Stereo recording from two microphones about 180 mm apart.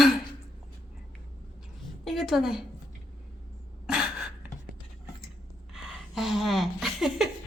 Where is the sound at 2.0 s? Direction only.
Centre (ahead or behind).